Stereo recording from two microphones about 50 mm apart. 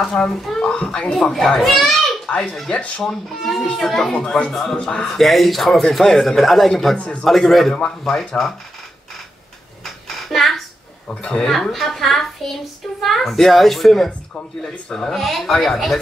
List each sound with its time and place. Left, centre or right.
0.0 s speech: centre
1.1 s speech: centre
2.7 s speech: left
3.0 s speech: centre
4.1 s speech: centre
4.5 s speech: centre
7.0 s speech: left
7.2 s speech: centre
10.0 s a sound: centre
11.1 s speech: left
11.4 s speech: centre